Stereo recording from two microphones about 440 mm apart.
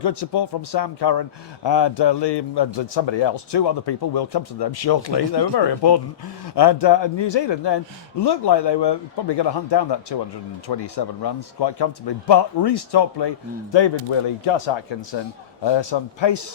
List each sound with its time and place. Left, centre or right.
0.0 s speech: left
15.6 s speech: left